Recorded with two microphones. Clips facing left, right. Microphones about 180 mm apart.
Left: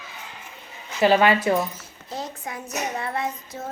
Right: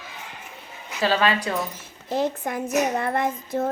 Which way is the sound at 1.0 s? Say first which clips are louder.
Left 4 dB; 25° left (ahead or behind).